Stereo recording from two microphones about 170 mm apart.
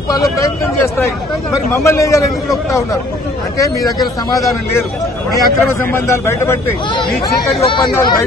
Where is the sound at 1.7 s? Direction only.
15° left (ahead or behind).